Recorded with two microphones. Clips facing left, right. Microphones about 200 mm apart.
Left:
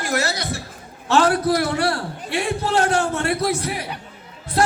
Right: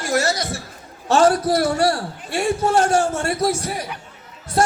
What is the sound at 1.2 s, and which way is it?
A man's voice, 60° left (ahead or behind).